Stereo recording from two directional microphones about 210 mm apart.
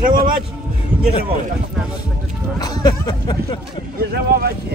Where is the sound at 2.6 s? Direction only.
20° left (ahead or behind).